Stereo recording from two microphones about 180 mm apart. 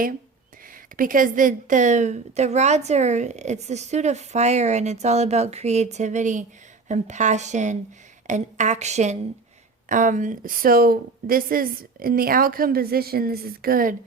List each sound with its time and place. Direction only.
0.9 s a woman's voice: 50° right (ahead or behind)